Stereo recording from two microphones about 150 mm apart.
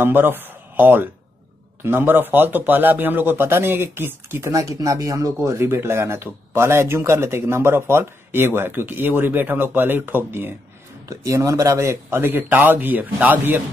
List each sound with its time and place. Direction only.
0.0 s speech: 15° right (ahead or behind)